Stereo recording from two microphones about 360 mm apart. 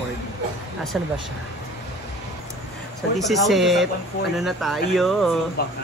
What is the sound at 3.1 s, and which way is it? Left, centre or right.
A man's voice, centre.